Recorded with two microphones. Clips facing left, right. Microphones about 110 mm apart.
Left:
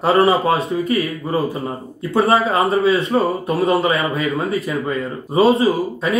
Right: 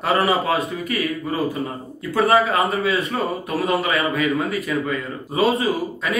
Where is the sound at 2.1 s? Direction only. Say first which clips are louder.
Left 1 dB; 30° left (ahead or behind).